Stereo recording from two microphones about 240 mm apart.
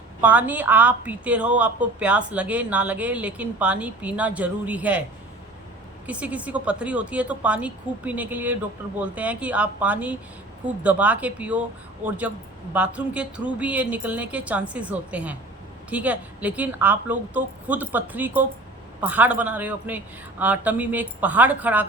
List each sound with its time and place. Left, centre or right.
0.2 s a woman's voice: centre
6.1 s a woman's voice: centre